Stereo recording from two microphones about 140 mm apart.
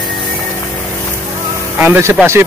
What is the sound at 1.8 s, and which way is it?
Speech, 15° right (ahead or behind).